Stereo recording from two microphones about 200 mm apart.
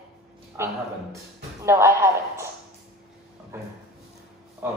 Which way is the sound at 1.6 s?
15° right (ahead or behind).